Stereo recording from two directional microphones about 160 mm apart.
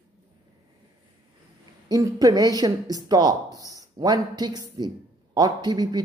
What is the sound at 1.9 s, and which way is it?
Speech, 20° right (ahead or behind).